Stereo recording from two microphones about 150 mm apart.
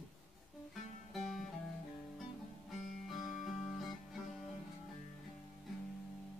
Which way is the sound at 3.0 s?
Centre (ahead or behind).